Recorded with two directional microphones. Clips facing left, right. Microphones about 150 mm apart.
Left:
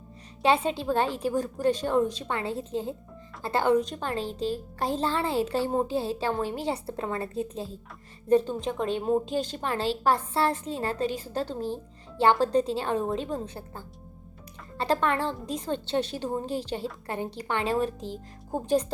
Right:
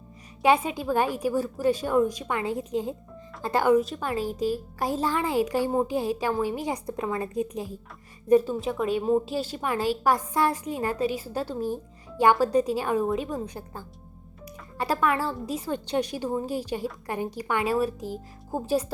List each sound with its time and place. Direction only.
0.4 s a woman's voice: 10° right (ahead or behind)